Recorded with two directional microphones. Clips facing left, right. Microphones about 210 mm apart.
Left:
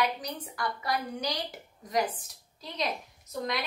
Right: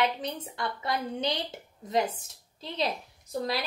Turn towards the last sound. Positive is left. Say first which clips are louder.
# right 2 dB
turn(degrees=-30)  # may be behind; listen again after turning